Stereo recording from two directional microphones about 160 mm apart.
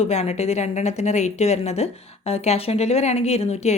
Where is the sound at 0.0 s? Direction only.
45° left (ahead or behind).